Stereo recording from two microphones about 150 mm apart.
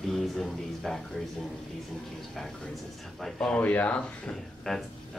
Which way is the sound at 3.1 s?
5° left (ahead or behind).